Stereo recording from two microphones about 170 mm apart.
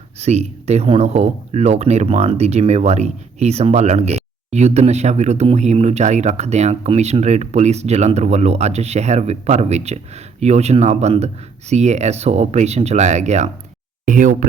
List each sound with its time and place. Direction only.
0.2 s speech: 40° right (ahead or behind)